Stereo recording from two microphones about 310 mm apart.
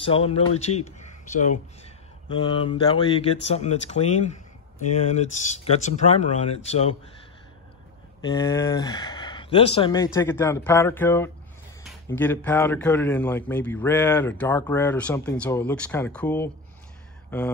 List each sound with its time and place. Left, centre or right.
0.0 s speech: centre
8.3 s a man's voice: centre